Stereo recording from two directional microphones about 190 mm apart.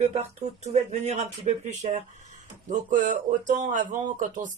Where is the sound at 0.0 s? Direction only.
35° right (ahead or behind).